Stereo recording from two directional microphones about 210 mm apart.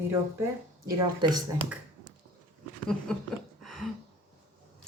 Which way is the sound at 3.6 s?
Centre (ahead or behind).